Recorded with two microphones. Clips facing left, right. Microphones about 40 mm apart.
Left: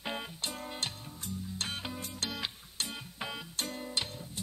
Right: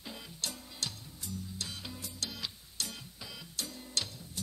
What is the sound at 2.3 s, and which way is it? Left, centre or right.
Music, left.